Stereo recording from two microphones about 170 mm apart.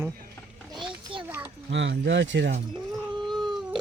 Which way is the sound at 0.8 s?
30° right (ahead or behind).